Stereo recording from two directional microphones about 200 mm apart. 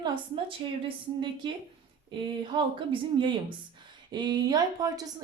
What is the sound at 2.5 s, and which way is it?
A woman's voice, 25° right (ahead or behind).